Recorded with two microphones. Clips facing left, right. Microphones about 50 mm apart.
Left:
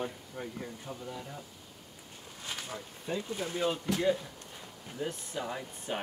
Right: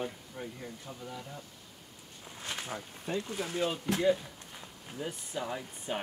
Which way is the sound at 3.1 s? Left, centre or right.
Right.